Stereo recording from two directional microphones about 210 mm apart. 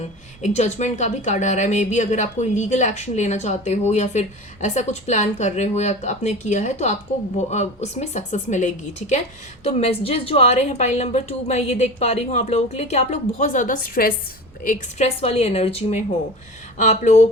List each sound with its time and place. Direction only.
0.4 s a woman's voice: 35° left (ahead or behind)